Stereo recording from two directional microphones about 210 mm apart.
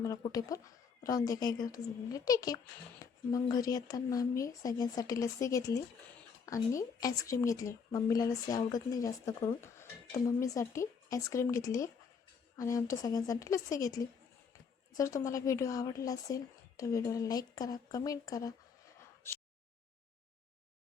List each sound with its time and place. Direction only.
0.3 s speech: 15° left (ahead or behind)